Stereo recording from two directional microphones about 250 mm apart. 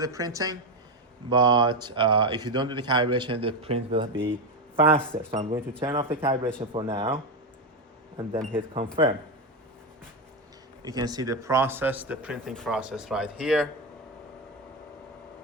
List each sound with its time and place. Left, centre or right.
0.0 s a man's voice: centre
8.5 s a man's voice: centre
10.8 s speech: centre